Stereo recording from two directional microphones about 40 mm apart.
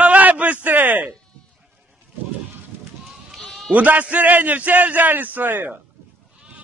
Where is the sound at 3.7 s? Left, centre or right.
Right.